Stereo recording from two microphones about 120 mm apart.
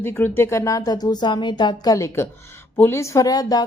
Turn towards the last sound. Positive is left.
turn(degrees=30)  # may be behind; listen again after turning